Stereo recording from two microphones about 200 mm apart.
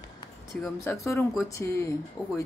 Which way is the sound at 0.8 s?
15° left (ahead or behind).